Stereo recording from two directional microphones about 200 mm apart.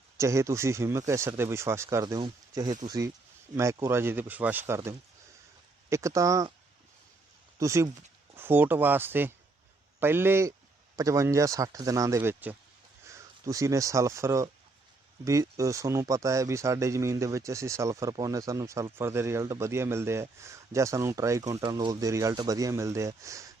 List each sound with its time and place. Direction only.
0.2 s speech: 15° right (ahead or behind)
7.6 s speech: 15° right (ahead or behind)